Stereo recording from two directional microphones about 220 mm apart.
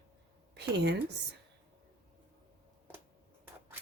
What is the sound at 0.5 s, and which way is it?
Speech, 50° right (ahead or behind).